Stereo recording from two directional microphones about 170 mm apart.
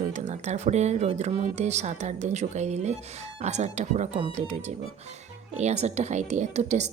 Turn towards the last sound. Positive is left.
turn(degrees=-40)  # may be behind; listen again after turning